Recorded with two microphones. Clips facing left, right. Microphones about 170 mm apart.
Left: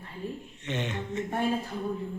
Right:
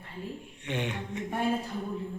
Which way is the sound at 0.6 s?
10° right (ahead or behind).